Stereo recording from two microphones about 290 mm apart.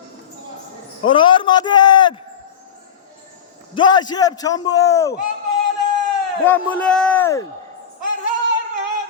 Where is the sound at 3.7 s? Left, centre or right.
Centre.